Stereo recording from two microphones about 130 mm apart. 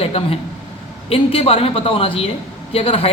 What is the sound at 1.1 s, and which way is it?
A man's voice, 50° left (ahead or behind).